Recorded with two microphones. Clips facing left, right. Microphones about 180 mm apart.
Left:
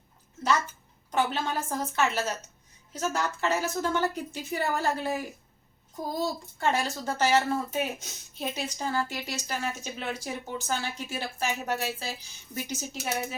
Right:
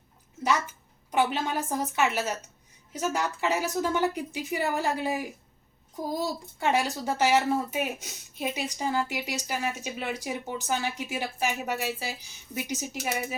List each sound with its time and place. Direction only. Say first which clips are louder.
1.1 s speech: right 2 dB; 15° right (ahead or behind)
6.6 s speech: right 2 dB; 15° right (ahead or behind)